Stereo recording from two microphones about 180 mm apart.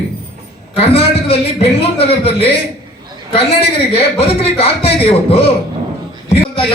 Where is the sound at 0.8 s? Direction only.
35° left (ahead or behind).